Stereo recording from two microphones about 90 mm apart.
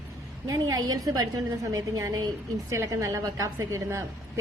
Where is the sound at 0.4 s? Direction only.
45° right (ahead or behind).